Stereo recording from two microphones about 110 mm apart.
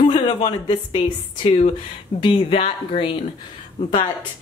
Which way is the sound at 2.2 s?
50° left (ahead or behind).